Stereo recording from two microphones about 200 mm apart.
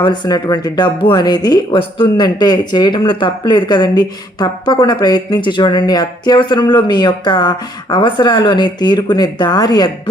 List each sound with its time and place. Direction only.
0.0 s speech: 20° left (ahead or behind)